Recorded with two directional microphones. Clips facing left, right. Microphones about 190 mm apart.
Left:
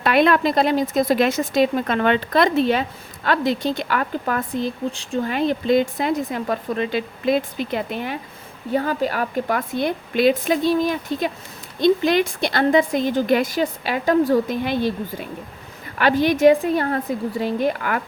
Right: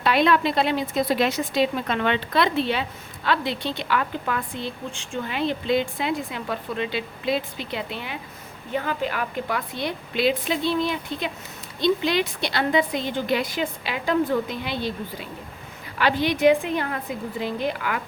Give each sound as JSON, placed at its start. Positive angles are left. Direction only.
{"t": 0.0, "sound": "a woman's voice", "side_deg": 55}
{"t": 16.0, "sound": "a woman's voice", "side_deg": 50}